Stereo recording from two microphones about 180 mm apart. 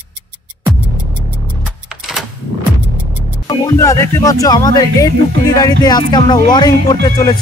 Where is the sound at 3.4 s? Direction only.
20° left (ahead or behind).